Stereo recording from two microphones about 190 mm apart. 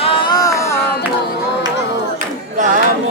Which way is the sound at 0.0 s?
25° left (ahead or behind).